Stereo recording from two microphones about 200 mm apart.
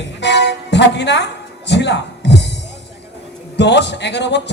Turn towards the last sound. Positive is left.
turn(degrees=60)  # may be behind; listen again after turning